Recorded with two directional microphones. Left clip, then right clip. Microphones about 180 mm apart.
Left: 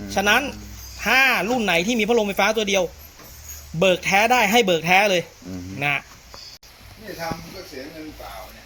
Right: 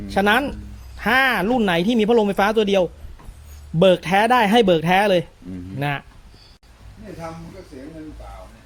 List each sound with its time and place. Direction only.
0.1 s speech: 40° right (ahead or behind)